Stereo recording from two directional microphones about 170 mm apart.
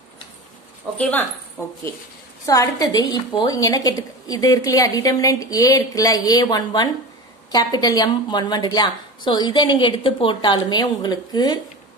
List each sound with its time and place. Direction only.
2.4 s a woman's voice: 20° left (ahead or behind)